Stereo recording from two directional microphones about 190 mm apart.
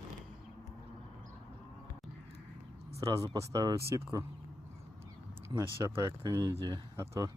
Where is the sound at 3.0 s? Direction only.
20° right (ahead or behind).